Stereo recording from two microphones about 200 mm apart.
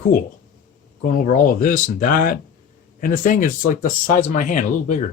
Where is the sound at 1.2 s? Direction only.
40° left (ahead or behind).